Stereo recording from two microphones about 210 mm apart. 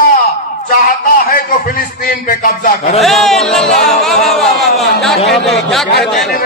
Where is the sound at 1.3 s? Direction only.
40° left (ahead or behind).